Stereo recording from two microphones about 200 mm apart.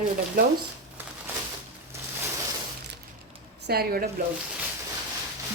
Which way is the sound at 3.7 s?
50° right (ahead or behind).